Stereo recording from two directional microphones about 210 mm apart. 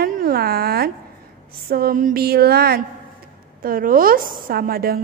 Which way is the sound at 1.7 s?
45° right (ahead or behind).